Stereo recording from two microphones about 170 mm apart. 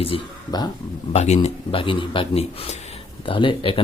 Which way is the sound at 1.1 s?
40° left (ahead or behind).